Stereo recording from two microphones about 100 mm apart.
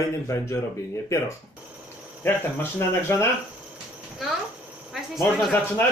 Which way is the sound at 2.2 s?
25° left (ahead or behind).